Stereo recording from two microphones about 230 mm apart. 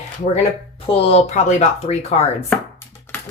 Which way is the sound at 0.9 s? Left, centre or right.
Left.